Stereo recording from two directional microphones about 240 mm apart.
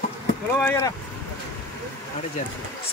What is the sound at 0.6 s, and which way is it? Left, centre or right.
Speech, centre.